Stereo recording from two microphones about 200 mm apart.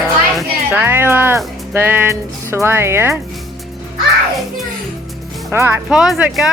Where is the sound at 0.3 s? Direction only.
5° right (ahead or behind).